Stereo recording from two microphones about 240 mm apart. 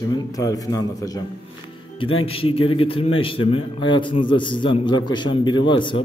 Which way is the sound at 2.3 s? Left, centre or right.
Left.